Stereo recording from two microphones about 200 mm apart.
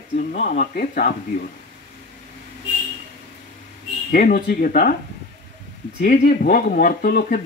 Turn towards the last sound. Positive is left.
turn(degrees=45)  # may be behind; listen again after turning